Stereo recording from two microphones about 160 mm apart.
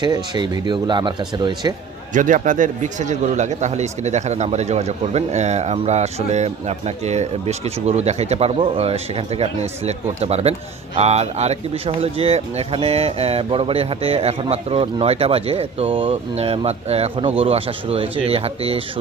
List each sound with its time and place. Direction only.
0.0 s speech: 30° right (ahead or behind)
2.1 s speech: 55° right (ahead or behind); by 18.8 s 35° right (ahead or behind)